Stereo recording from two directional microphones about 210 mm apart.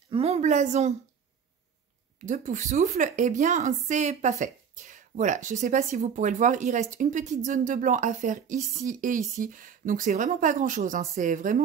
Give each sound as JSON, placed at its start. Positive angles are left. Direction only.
{"t": 0.1, "sound": "a woman's voice", "side_deg": -30}
{"t": 2.2, "sound": "a woman's voice", "side_deg": -35}